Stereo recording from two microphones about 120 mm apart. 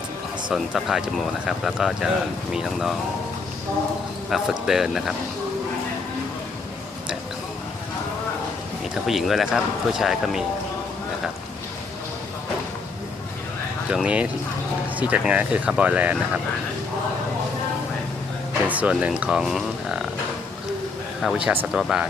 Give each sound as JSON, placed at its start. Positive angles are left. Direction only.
{"t": 0.5, "sound": "speech", "side_deg": -5}
{"t": 4.3, "sound": "speech", "side_deg": -5}
{"t": 9.0, "sound": "speech", "side_deg": 0}
{"t": 13.9, "sound": "speech", "side_deg": -10}
{"t": 18.7, "sound": "speech", "side_deg": -10}
{"t": 21.2, "sound": "speech", "side_deg": -5}